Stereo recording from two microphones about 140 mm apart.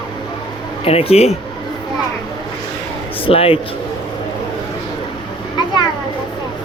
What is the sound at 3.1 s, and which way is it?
Speech, 40° left (ahead or behind).